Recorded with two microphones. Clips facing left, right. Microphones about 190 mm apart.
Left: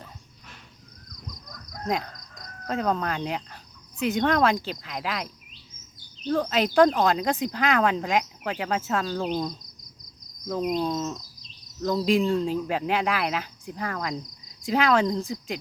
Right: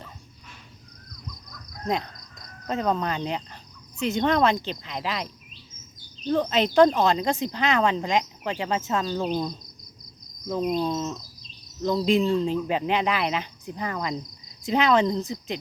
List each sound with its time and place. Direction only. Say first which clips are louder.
2.6 s speech: right 1 dB; centre (ahead or behind)
6.4 s speech: right 1 dB; 5° left (ahead or behind)
10.8 s speech: right 1 dB; centre (ahead or behind)